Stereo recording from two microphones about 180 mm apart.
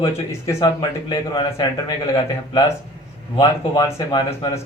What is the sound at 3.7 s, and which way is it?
Speech, 25° left (ahead or behind).